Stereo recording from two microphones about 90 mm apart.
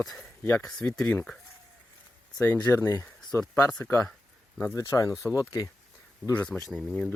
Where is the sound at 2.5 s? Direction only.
25° left (ahead or behind).